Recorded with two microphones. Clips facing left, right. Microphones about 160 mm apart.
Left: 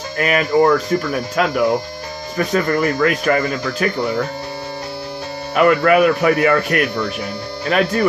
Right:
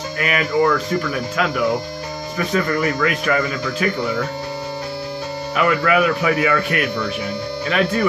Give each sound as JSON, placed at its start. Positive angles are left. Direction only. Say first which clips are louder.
{"t": 0.2, "sound": "speech", "louder": "left 4 dB", "side_deg": 40}
{"t": 5.5, "sound": "speech", "louder": "left 5 dB", "side_deg": 50}